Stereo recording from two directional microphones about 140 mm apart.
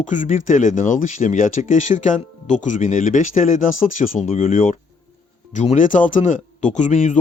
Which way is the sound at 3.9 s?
55° left (ahead or behind).